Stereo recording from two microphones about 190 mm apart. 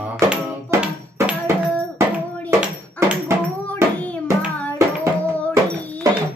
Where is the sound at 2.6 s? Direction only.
10° right (ahead or behind).